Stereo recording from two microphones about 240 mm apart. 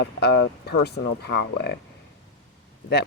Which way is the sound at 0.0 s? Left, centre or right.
Left.